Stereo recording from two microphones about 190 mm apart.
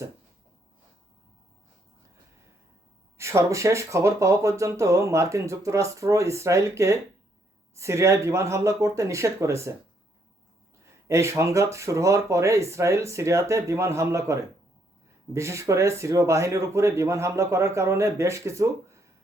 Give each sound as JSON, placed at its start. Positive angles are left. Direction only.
{"t": 3.2, "sound": "speech", "side_deg": -15}
{"t": 11.1, "sound": "speech", "side_deg": -15}